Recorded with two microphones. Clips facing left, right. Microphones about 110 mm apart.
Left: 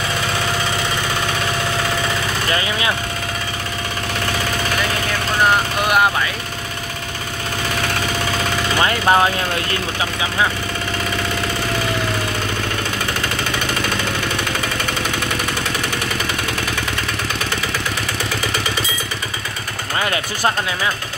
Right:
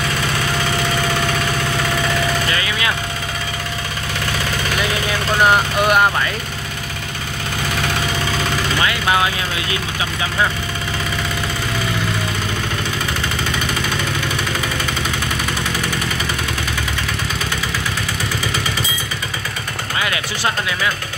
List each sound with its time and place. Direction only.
2.5 s vehicle: 30° left (ahead or behind)
8.7 s speech: 35° left (ahead or behind)
20.0 s speech: 35° left (ahead or behind)